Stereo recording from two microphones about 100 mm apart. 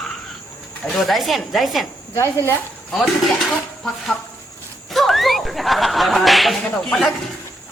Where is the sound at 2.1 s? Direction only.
30° left (ahead or behind).